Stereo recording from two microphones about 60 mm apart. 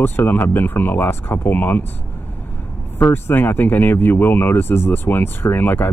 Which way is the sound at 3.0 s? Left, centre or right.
Left.